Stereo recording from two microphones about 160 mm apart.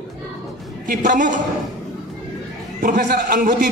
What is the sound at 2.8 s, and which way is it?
Speech, 60° right (ahead or behind).